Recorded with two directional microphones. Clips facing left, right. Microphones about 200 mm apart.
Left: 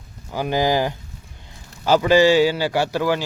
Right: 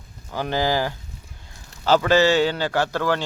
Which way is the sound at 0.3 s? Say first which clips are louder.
Left 3 dB; 15° left (ahead or behind).